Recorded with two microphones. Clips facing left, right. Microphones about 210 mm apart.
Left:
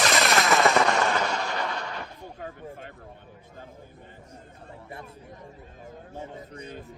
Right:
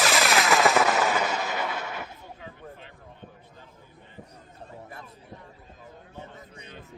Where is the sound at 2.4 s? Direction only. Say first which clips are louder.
Left 8 dB; 45° left (ahead or behind).